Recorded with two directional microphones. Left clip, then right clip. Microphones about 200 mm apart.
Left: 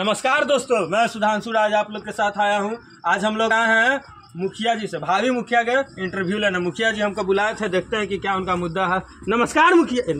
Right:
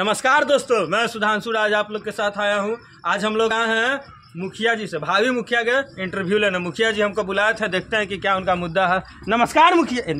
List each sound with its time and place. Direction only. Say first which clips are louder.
0.0 s a man's voice: right 2 dB; 20° right (ahead or behind)
9.8 s a man's voice: left 2 dB; 40° right (ahead or behind)